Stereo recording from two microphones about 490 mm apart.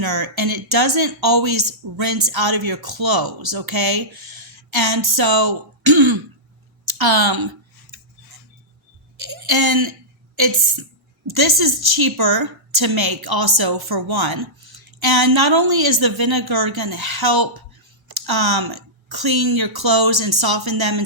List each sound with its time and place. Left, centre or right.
0.0 s speech: right
9.5 s speech: right
11.3 s speech: right